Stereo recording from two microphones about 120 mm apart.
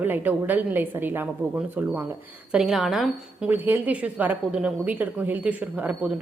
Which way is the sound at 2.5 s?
5° right (ahead or behind).